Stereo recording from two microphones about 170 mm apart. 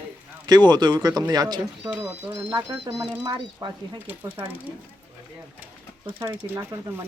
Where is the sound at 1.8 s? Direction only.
10° right (ahead or behind).